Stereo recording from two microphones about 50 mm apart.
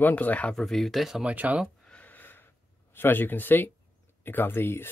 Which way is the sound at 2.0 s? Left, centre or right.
Left.